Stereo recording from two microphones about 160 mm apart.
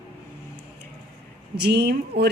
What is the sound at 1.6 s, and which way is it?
Speech, 90° right.